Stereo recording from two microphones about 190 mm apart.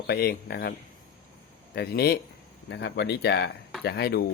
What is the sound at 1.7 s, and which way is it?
Speech, 55° left (ahead or behind).